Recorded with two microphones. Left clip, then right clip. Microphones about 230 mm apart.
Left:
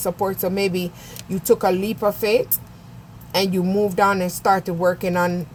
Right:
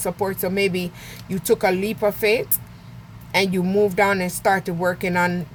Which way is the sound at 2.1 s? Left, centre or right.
Right.